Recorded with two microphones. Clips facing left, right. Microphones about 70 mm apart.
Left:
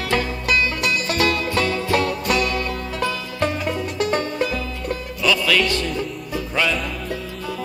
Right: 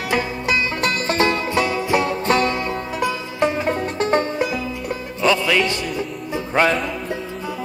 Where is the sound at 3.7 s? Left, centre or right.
Right.